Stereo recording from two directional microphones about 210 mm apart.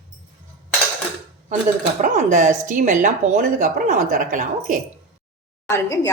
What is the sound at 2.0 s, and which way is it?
Speech, 35° right (ahead or behind).